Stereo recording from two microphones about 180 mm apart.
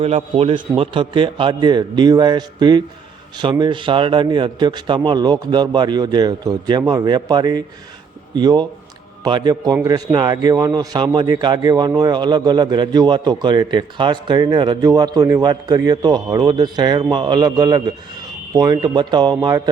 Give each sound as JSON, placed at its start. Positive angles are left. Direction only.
{"t": 0.0, "sound": "a man's voice", "side_deg": -35}